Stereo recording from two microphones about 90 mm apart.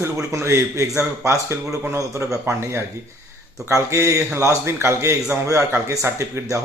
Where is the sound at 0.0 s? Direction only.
35° right (ahead or behind).